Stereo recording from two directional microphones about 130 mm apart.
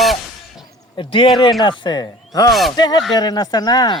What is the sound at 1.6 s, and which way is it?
Speech, 35° left (ahead or behind).